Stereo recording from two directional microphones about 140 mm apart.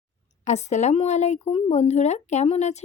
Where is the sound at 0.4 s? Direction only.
55° left (ahead or behind).